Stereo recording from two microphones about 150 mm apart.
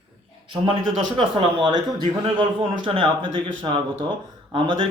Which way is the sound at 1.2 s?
35° right (ahead or behind).